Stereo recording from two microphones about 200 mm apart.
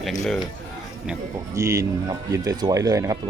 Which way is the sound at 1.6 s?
15° right (ahead or behind).